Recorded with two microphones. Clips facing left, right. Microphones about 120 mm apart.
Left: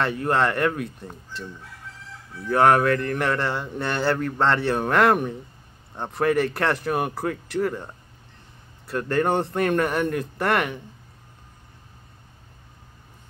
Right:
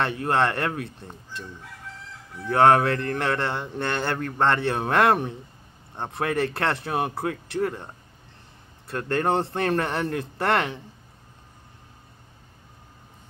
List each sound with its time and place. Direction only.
0.2 s a man's voice: 25° right (ahead or behind)
2.5 s a man's voice: 25° right (ahead or behind)